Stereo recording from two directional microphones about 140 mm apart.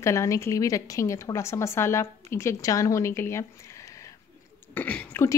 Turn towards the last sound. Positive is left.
turn(degrees=15)  # may be behind; listen again after turning